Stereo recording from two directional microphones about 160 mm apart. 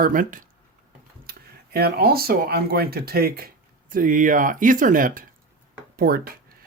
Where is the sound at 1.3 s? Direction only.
75° right (ahead or behind).